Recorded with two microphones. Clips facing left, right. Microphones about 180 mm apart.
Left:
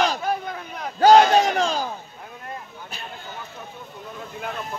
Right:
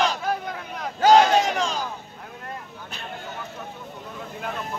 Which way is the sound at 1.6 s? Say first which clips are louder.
Left 3 dB; 35° left (ahead or behind).